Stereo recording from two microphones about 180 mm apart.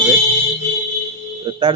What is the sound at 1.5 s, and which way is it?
Speech, 25° right (ahead or behind).